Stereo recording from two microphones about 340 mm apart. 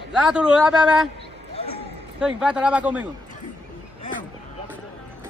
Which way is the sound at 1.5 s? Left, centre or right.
Centre.